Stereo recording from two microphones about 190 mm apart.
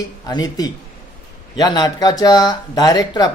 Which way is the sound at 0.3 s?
20° left (ahead or behind).